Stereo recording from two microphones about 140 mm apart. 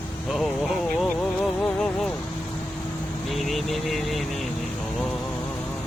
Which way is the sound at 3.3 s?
Centre (ahead or behind).